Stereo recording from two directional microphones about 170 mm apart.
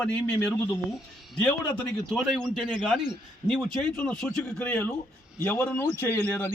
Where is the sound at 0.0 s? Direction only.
5° left (ahead or behind).